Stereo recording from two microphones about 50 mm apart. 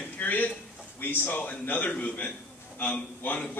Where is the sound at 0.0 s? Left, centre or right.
Left.